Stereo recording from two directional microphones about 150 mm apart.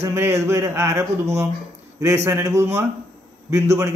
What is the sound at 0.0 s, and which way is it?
A man's voice, 15° right (ahead or behind).